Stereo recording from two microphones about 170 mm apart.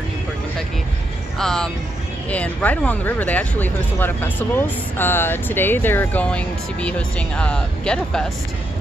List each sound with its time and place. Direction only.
1.4 s speech: 5° left (ahead or behind)